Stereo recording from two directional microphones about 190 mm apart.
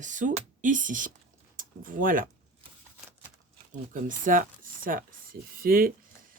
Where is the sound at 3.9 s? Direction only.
45° right (ahead or behind).